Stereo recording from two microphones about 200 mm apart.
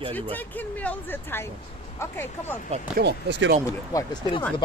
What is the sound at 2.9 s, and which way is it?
Speech, 55° right (ahead or behind).